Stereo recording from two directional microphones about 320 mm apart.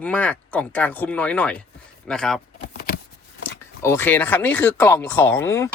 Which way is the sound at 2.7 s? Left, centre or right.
Left.